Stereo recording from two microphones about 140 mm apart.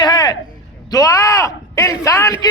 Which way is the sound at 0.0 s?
30° left (ahead or behind).